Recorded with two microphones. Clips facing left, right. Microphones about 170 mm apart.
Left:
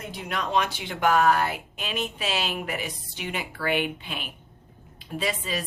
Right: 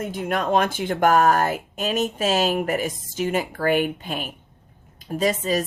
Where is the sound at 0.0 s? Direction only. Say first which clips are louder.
Right 7 dB; 50° right (ahead or behind).